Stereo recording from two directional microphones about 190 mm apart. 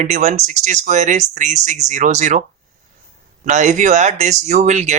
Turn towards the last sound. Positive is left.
turn(degrees=-40)  # may be behind; listen again after turning